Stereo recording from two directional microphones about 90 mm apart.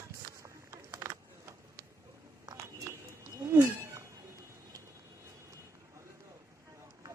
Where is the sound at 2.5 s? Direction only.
45° right (ahead or behind).